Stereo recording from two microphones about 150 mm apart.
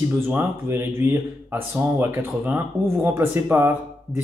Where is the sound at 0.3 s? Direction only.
15° right (ahead or behind).